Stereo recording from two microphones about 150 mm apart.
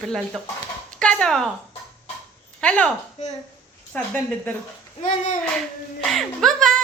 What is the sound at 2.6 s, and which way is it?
Speech, 10° left (ahead or behind).